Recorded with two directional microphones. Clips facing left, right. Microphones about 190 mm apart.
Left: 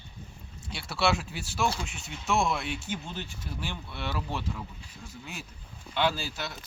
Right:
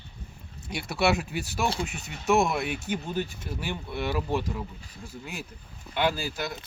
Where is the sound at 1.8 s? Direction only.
60° right (ahead or behind).